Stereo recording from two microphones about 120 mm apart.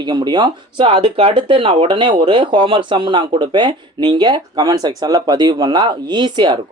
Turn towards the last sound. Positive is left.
turn(degrees=-40)  # may be behind; listen again after turning